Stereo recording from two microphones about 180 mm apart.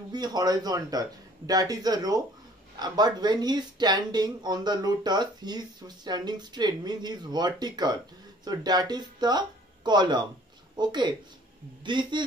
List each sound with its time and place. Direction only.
0.1 s speech: 20° right (ahead or behind)